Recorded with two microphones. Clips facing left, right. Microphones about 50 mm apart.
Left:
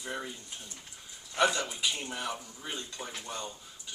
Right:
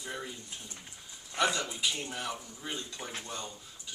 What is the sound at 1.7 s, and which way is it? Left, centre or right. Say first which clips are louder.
Speech: even; centre.